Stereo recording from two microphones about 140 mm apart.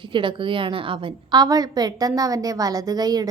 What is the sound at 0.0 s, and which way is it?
A woman's voice, 35° right (ahead or behind).